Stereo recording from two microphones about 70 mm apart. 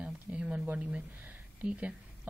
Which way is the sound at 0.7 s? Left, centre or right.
Centre.